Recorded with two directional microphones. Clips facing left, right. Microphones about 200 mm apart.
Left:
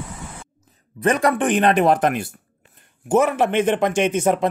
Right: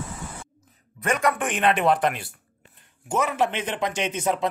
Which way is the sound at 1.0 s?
35° left (ahead or behind).